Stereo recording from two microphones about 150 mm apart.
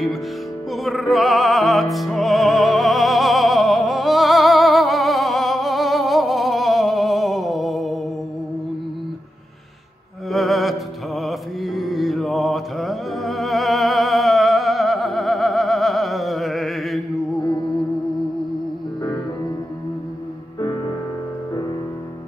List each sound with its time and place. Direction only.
0.8 s music: centre (ahead or behind)
10.3 s music: centre (ahead or behind)
17.4 s music: 30° left (ahead or behind)